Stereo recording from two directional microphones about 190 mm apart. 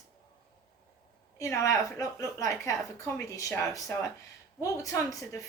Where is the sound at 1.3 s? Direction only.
15° left (ahead or behind).